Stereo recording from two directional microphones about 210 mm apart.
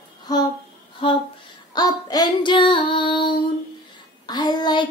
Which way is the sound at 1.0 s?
25° left (ahead or behind).